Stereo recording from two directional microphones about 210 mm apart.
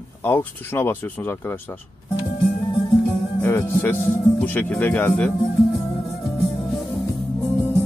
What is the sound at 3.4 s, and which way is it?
Speech, 10° left (ahead or behind).